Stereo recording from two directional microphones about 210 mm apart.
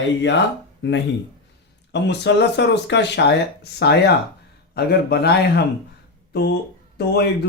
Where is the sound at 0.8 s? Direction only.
55° left (ahead or behind).